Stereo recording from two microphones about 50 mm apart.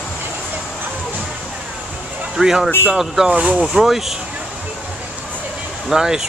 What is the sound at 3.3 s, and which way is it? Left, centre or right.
Speech, right.